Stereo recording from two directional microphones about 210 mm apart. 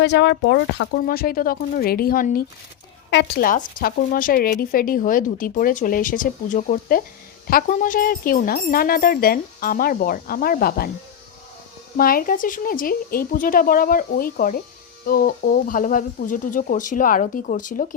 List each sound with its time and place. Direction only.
0.0 s speech: 55° left (ahead or behind)
1.0 s speech: 45° left (ahead or behind)
3.1 s speech: 55° left (ahead or behind)
11.9 s speech: 45° left (ahead or behind)